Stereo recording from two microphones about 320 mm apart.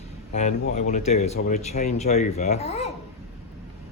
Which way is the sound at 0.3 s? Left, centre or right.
Left.